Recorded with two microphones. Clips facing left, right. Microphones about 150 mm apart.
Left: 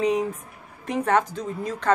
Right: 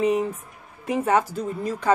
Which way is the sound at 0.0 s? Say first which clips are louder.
Right 1 dB; 5° right (ahead or behind).